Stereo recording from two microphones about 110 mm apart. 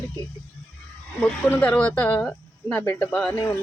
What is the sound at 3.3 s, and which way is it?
Speech, 20° left (ahead or behind).